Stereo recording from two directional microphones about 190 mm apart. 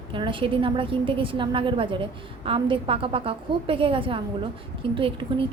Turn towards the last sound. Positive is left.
turn(degrees=-25)  # may be behind; listen again after turning